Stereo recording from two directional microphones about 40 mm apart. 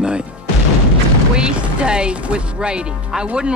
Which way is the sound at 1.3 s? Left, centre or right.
Centre.